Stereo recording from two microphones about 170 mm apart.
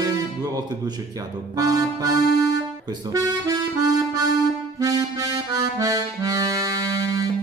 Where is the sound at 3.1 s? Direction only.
20° right (ahead or behind).